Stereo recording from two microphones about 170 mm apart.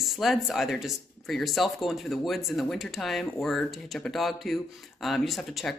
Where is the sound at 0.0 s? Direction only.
Centre (ahead or behind).